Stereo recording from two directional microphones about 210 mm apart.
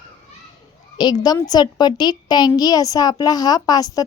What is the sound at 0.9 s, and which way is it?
A woman's voice, 20° left (ahead or behind).